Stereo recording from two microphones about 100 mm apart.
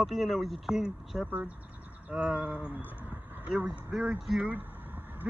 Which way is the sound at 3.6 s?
15° right (ahead or behind).